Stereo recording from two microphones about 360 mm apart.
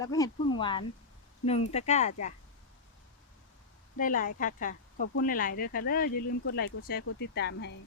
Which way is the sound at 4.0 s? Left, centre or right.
Left.